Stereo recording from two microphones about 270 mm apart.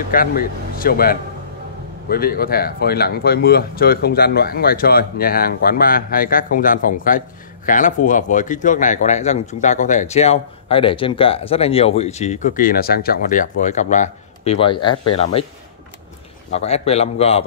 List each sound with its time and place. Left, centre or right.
0.1 s speech: left
16.5 s speech: left